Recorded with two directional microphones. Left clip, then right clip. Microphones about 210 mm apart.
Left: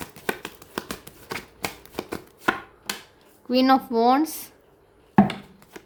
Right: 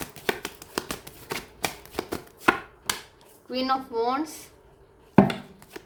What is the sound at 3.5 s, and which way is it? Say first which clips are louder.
Speech: left 7 dB; 50° left (ahead or behind).